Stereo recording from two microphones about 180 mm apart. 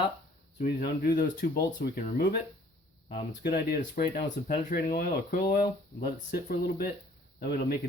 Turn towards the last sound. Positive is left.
turn(degrees=55)  # may be behind; listen again after turning